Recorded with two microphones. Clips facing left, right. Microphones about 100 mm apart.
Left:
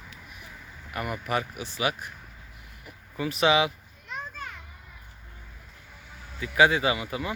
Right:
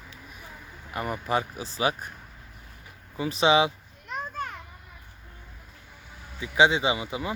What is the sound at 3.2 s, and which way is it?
Speech, 30° right (ahead or behind).